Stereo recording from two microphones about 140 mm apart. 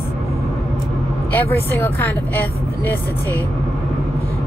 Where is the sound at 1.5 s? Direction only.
15° left (ahead or behind).